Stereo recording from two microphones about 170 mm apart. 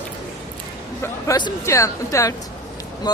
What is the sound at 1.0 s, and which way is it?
Speech, 20° left (ahead or behind).